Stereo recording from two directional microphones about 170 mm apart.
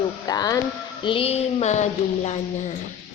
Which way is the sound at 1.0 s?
35° left (ahead or behind).